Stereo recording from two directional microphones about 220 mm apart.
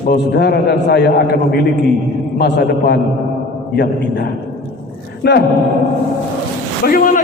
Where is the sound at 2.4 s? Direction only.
50° left (ahead or behind).